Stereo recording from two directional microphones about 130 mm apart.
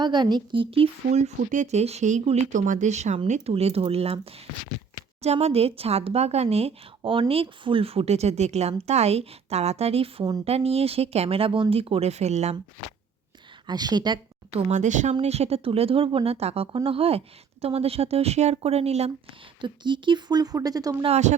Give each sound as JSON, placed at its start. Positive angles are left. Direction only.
{"t": 0.0, "sound": "speech", "side_deg": -35}
{"t": 1.4, "sound": "speech", "side_deg": -80}
{"t": 3.5, "sound": "speech", "side_deg": -50}
{"t": 13.7, "sound": "speech", "side_deg": -30}
{"t": 14.5, "sound": "speech", "side_deg": -65}
{"t": 15.2, "sound": "speech", "side_deg": -55}
{"t": 19.6, "sound": "speech", "side_deg": -35}
{"t": 21.0, "sound": "speech", "side_deg": -60}